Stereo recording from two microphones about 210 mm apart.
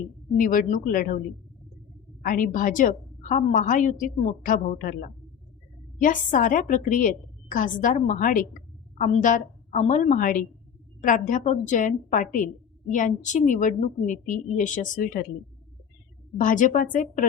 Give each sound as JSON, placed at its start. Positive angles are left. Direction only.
{"t": 0.3, "sound": "a woman's voice", "side_deg": 40}
{"t": 2.2, "sound": "a woman's voice", "side_deg": 40}
{"t": 16.4, "sound": "a woman's voice", "side_deg": 40}